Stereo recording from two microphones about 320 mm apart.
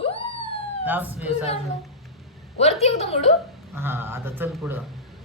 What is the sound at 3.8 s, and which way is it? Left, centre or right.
Speech, centre.